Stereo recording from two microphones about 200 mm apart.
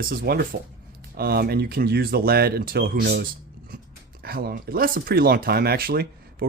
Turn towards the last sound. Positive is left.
turn(degrees=-50)  # may be behind; listen again after turning